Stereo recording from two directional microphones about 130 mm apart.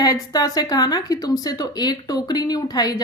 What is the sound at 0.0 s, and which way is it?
A woman's voice, 30° left (ahead or behind).